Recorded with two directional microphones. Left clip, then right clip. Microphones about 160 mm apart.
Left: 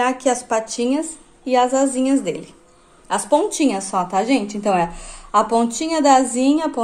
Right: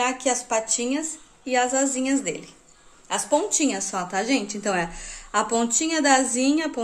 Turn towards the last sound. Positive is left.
turn(degrees=0)  # may be behind; listen again after turning